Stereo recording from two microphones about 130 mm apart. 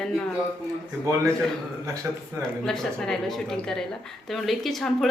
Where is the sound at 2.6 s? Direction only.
5° left (ahead or behind).